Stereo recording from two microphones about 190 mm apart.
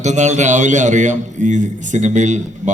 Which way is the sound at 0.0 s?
40° right (ahead or behind).